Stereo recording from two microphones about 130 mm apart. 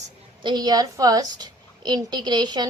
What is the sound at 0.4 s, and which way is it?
A child's voice, 35° right (ahead or behind).